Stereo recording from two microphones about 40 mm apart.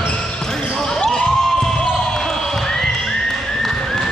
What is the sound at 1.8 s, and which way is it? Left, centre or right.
Basketball bounce, left.